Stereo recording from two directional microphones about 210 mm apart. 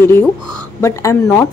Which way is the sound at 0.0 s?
10° left (ahead or behind).